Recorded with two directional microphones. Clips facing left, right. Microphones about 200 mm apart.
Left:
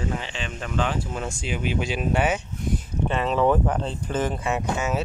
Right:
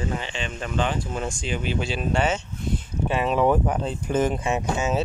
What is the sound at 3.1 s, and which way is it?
Speech, 10° right (ahead or behind).